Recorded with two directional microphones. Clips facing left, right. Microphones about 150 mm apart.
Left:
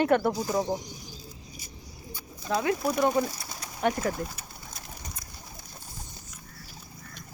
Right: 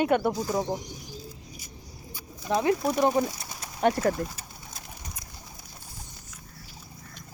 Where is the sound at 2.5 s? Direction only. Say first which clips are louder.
Right 2 dB; 20° right (ahead or behind); by 4.1 s 40° right (ahead or behind).